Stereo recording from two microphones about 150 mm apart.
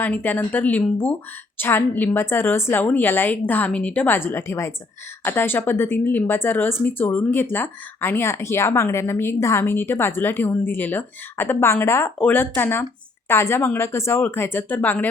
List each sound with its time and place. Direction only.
0.0 s speech: 10° left (ahead or behind)